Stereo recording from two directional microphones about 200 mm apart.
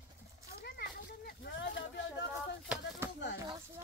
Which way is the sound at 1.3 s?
60° left (ahead or behind).